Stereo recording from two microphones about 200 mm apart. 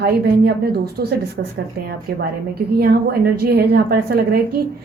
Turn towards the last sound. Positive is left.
turn(degrees=-50)  # may be behind; listen again after turning